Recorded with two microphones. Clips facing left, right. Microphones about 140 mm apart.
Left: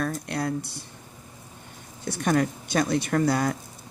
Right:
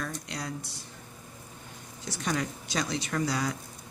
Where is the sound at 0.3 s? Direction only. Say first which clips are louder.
Left 9 dB; 55° left (ahead or behind).